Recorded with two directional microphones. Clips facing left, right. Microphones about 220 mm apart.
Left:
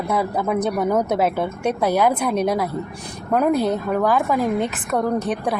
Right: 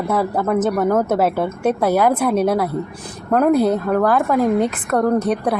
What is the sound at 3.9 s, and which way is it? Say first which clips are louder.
Speech: right 3 dB; 5° left (ahead or behind).